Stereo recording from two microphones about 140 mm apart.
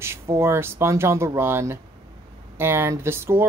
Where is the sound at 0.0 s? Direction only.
20° right (ahead or behind).